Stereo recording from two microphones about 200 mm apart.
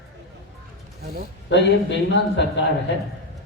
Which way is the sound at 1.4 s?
65° left (ahead or behind).